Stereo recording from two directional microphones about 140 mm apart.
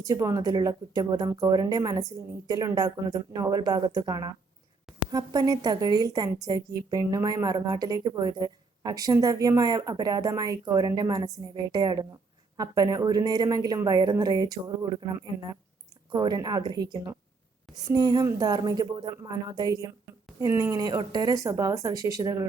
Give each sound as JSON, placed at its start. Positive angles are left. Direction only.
{"t": 0.0, "sound": "a woman's voice", "side_deg": -25}